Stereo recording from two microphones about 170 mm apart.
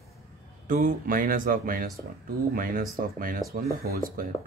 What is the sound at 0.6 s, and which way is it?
Speech, 50° right (ahead or behind).